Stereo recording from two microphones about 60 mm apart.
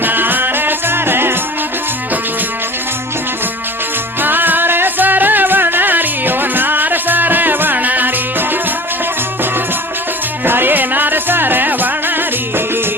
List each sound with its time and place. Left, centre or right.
0.0 s music: right
4.2 s music: right
10.4 s music: right